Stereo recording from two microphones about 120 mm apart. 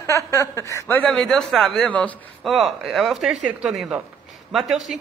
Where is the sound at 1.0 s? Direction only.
5° left (ahead or behind).